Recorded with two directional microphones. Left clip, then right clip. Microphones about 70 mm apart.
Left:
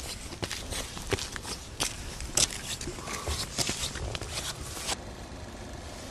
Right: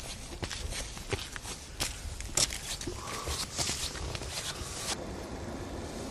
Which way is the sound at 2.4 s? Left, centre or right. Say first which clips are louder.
Left 3 dB; centre.